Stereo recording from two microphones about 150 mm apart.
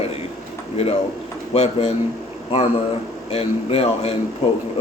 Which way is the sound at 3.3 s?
40° left (ahead or behind).